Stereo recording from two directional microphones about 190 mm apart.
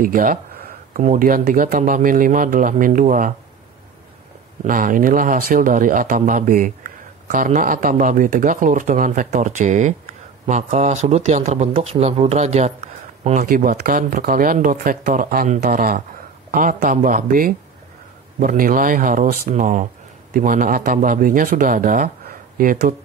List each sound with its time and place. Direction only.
0.0 s speech: 45° right (ahead or behind)
4.6 s speech: 45° right (ahead or behind)